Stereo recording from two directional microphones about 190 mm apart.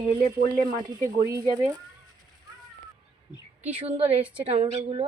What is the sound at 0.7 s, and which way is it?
Speech, 20° right (ahead or behind).